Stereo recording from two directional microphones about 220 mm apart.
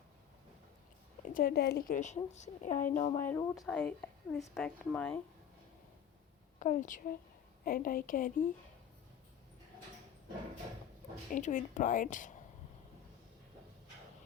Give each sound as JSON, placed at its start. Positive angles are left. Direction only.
{"t": 1.3, "sound": "a woman's voice", "side_deg": 40}
{"t": 2.0, "sound": "speech", "side_deg": 30}
{"t": 3.2, "sound": "a woman's voice", "side_deg": 10}
{"t": 6.6, "sound": "speech", "side_deg": 35}
{"t": 11.3, "sound": "speech", "side_deg": 35}